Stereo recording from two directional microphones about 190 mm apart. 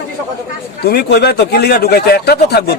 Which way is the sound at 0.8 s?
55° left (ahead or behind).